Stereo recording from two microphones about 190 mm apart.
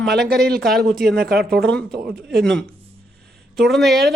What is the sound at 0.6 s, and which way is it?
Speech, centre (ahead or behind).